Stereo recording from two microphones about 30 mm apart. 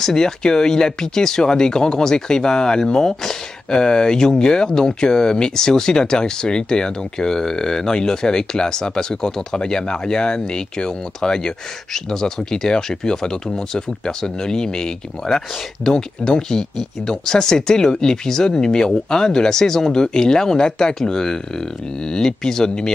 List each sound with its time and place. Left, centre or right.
0.0 s speech: left